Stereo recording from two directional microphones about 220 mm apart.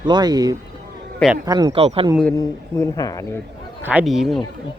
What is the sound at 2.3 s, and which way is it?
Speech, 15° left (ahead or behind).